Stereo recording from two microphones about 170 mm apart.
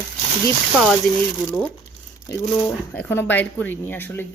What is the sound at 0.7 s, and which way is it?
Speech, centre (ahead or behind).